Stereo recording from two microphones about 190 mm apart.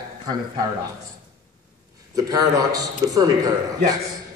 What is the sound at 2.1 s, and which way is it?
A man's voice, 20° right (ahead or behind).